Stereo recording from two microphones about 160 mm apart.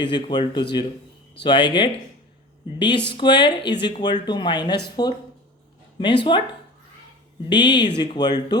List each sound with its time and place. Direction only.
0.0 s speech: 30° left (ahead or behind)